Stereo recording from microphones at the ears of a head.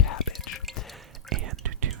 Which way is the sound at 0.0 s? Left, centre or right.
Left.